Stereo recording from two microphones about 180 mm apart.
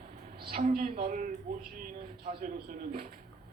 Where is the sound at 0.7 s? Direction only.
55° right (ahead or behind).